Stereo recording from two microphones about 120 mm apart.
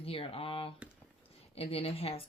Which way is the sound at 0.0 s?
50° left (ahead or behind).